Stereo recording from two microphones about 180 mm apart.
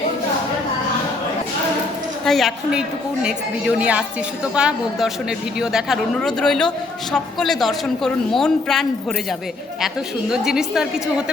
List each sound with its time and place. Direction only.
2.2 s speech: centre (ahead or behind)
10.3 s speech: 5° right (ahead or behind)